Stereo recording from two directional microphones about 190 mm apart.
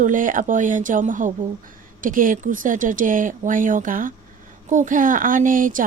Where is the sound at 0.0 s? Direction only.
45° right (ahead or behind).